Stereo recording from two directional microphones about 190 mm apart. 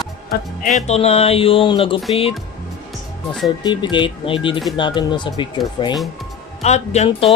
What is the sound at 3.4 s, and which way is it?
Speech, 25° left (ahead or behind).